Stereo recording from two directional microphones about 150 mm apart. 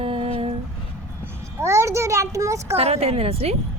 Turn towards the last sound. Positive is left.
turn(degrees=-40)  # may be behind; listen again after turning